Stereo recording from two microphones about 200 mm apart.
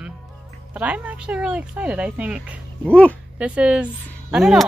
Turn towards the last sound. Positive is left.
turn(degrees=0)  # may be behind; listen again after turning